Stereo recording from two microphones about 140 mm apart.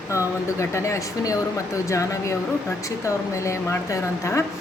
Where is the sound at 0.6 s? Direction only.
20° left (ahead or behind).